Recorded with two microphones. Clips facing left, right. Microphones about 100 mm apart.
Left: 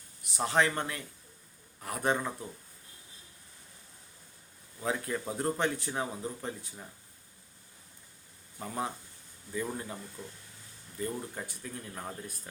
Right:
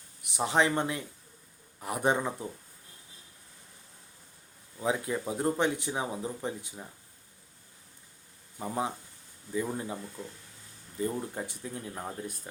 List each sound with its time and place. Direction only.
0.3 s speech: 15° right (ahead or behind)
4.8 s speech: 15° right (ahead or behind)
8.6 s speech: 15° right (ahead or behind)